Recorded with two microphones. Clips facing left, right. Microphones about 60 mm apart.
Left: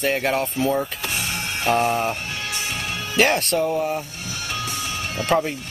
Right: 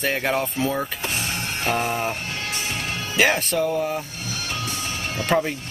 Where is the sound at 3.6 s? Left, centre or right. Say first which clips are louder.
Left 1 dB; centre.